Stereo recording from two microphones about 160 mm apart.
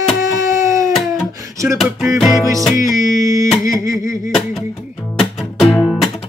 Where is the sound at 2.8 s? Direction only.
20° right (ahead or behind).